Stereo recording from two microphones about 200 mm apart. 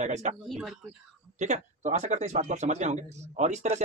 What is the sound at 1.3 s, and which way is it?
Speech, 35° right (ahead or behind).